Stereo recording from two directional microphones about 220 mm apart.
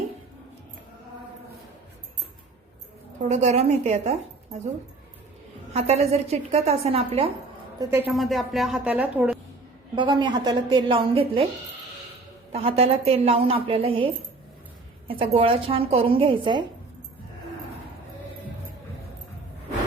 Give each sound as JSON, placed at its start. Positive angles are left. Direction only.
{"t": 3.2, "sound": "a woman's voice", "side_deg": -30}
{"t": 5.7, "sound": "a woman's voice", "side_deg": -30}
{"t": 7.8, "sound": "a woman's voice", "side_deg": -10}
{"t": 8.1, "sound": "a woman's voice", "side_deg": 0}
{"t": 9.9, "sound": "a woman's voice", "side_deg": -20}
{"t": 12.5, "sound": "a woman's voice", "side_deg": -25}